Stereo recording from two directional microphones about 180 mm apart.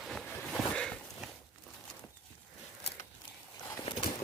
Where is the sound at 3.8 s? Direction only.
30° left (ahead or behind).